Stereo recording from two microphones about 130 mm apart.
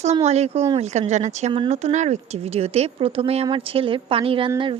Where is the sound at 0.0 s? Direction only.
55° right (ahead or behind).